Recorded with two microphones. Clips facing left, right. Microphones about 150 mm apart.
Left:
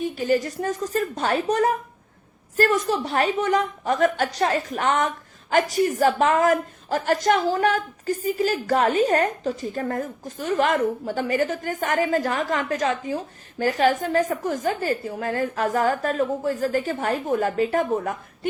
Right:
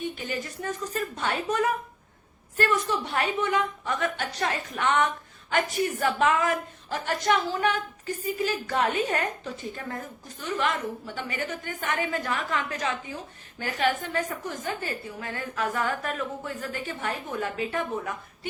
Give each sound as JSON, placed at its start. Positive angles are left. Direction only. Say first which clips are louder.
{"t": 0.2, "sound": "a woman's voice", "louder": "left 11 dB", "side_deg": 40}